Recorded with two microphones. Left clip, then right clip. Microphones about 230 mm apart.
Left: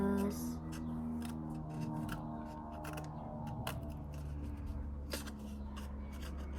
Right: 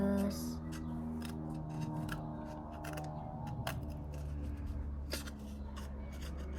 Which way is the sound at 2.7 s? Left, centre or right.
Centre.